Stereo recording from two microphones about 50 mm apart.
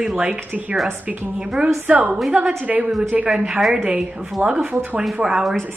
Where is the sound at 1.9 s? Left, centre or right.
Right.